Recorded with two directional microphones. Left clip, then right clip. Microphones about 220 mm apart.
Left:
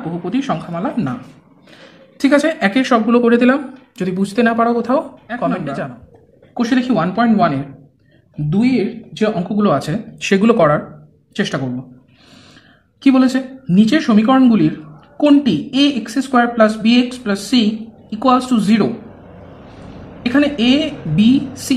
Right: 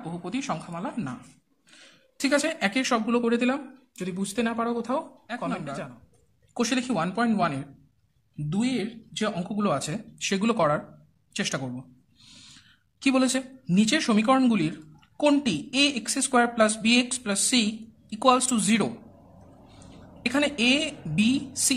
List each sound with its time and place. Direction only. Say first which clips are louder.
0.2 s a woman's voice: left 11 dB; 20° right (ahead or behind)
2.1 s a woman's voice: left 11 dB; 15° right (ahead or behind)
6.5 s a woman's voice: left 10 dB; 30° right (ahead or behind); by 10.8 s 10° right (ahead or behind)
11.3 s a woman's voice: left 9 dB; 25° right (ahead or behind)
13.0 s a woman's voice: left 10 dB; 25° right (ahead or behind)
20.2 s a woman's voice: left 8 dB; 25° right (ahead or behind)